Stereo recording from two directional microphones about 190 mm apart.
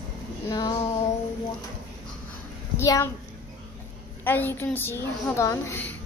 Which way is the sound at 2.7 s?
15° left (ahead or behind).